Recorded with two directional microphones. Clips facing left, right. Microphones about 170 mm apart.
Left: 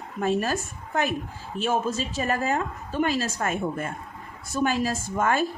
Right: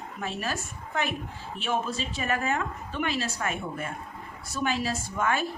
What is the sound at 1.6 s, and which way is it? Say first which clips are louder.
A woman's voice: left 4 dB; 45° left (ahead or behind).